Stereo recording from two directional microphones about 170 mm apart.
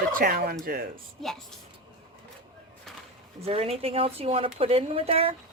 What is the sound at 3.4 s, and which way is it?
Speech, 35° right (ahead or behind).